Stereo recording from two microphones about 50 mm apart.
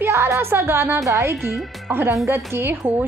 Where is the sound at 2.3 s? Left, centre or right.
Right.